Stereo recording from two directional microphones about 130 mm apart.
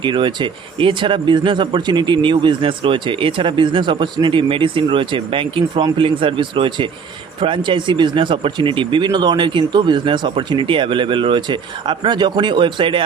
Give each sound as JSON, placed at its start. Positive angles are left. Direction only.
{"t": 0.0, "sound": "speech", "side_deg": -40}